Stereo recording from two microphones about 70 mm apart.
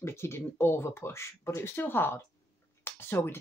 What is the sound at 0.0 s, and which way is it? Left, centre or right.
Speech, left.